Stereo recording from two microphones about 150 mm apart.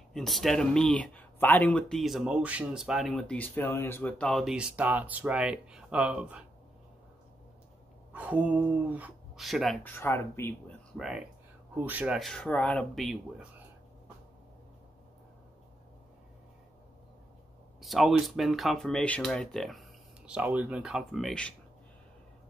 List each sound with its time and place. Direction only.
0.1 s speech: centre (ahead or behind)
8.1 s speech: 10° right (ahead or behind)
9.8 s speech: 15° left (ahead or behind)
11.0 s speech: 5° right (ahead or behind)
17.7 s speech: centre (ahead or behind)
20.2 s speech: 10° right (ahead or behind)